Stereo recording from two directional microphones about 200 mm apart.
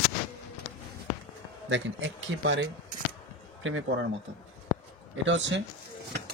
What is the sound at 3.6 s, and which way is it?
Speech, 80° right.